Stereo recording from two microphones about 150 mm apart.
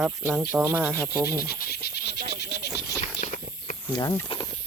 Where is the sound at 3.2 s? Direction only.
60° left (ahead or behind).